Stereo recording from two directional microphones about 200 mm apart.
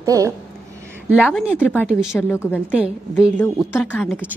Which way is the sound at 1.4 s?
5° right (ahead or behind).